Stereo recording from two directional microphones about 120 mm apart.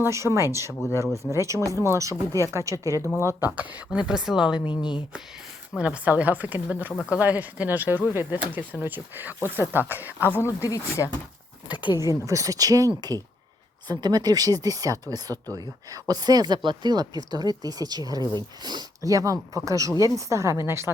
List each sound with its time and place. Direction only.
0.0 s speech: 25° right (ahead or behind); by 4.7 s 5° right (ahead or behind)
4.7 s speech: 40° left (ahead or behind)
5.7 s speech: 10° right (ahead or behind)
10.2 s speech: 20° left (ahead or behind)
12.2 s speech: 25° right (ahead or behind)